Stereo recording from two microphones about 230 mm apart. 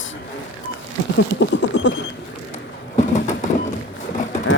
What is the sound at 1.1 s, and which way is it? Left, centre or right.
Vehicle, left.